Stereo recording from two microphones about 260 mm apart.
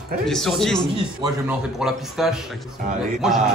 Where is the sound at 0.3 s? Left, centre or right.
Centre.